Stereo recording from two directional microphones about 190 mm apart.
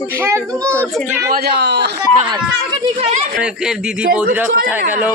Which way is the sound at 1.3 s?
60° right (ahead or behind).